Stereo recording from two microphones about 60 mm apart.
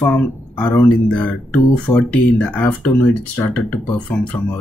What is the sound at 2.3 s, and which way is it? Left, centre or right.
Speech, left.